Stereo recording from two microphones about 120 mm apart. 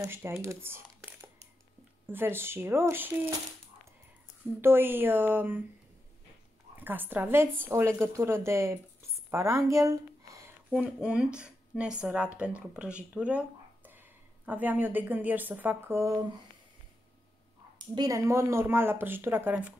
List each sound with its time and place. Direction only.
0.0 s speech: 20° right (ahead or behind)
4.6 s speech: 15° right (ahead or behind)
6.8 s a woman's voice: 15° right (ahead or behind)
10.7 s speech: 10° right (ahead or behind); by 16.3 s 25° right (ahead or behind)
17.9 s speech: 30° right (ahead or behind)